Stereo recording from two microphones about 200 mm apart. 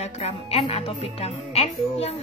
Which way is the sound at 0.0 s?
30° left (ahead or behind).